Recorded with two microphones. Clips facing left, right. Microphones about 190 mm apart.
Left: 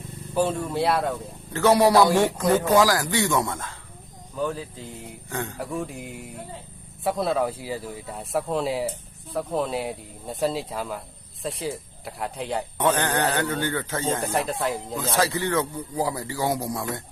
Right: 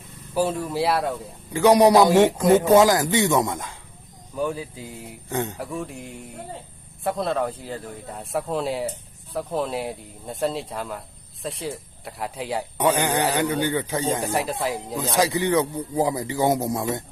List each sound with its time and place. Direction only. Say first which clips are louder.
0.3 s speech: right 1 dB; 5° right (ahead or behind)
1.5 s a man's voice: right 3 dB; 15° right (ahead or behind)
5.5 s a man's voice: left 1 dB; centre (ahead or behind); by 14.2 s 15° right (ahead or behind)
14.3 s speech: even; centre (ahead or behind)
14.9 s a man's voice: right 4 dB; 15° right (ahead or behind)